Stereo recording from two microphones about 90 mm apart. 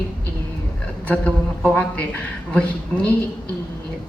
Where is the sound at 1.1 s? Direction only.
10° left (ahead or behind).